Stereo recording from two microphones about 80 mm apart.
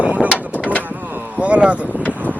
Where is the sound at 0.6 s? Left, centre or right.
Centre.